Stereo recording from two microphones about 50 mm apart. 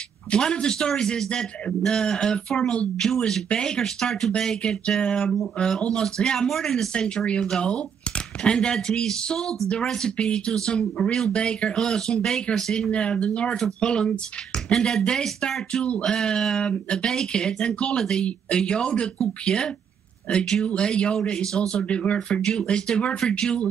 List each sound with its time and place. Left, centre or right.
0.3 s a man's voice: centre
12.9 s a man's voice: left